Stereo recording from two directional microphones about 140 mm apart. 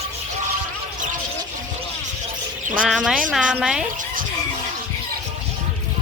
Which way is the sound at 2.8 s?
Centre (ahead or behind).